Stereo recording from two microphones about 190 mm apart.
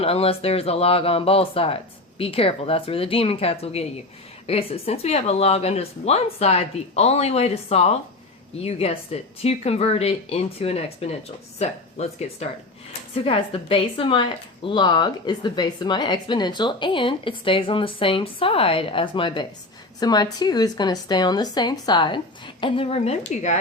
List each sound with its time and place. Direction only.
0.0 s a woman's voice: 30° left (ahead or behind)